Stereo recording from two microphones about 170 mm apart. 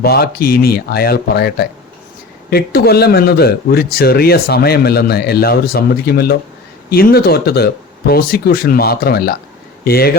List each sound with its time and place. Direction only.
0.0 s speech: 65° left (ahead or behind)